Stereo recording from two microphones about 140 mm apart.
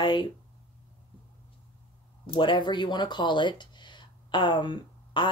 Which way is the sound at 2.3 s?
35° left (ahead or behind).